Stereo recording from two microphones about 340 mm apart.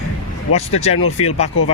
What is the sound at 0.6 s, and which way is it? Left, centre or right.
Speech, centre.